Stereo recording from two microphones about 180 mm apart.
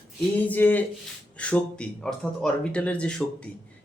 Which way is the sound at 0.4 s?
10° left (ahead or behind).